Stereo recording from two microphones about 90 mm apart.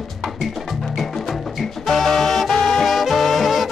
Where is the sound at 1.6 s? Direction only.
Centre (ahead or behind).